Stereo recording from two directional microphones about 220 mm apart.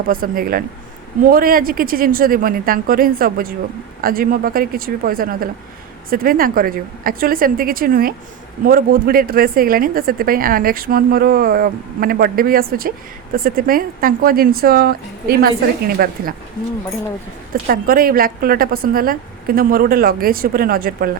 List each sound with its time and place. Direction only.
0.1 s speech: 40° right (ahead or behind)
17.5 s speech: 40° right (ahead or behind)